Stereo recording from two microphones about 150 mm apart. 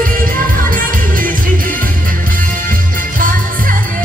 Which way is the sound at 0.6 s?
65° right (ahead or behind).